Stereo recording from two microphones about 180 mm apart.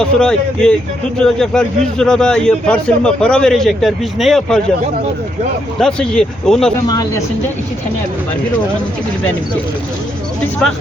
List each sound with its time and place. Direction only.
0.0 s a man's voice: 5° left (ahead or behind)
5.8 s a man's voice: 5° left (ahead or behind)
6.8 s speech: 20° left (ahead or behind)